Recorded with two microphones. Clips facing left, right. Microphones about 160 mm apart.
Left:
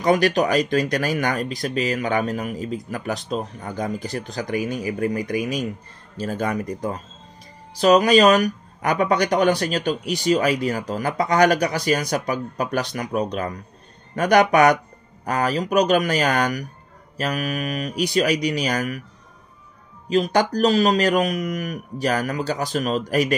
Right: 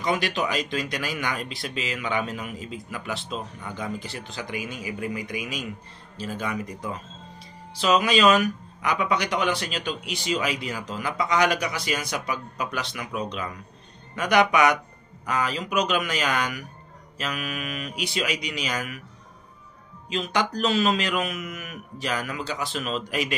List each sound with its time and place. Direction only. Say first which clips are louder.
0.0 s speech: left 8 dB; 45° left (ahead or behind)
20.1 s speech: left 7 dB; 45° left (ahead or behind)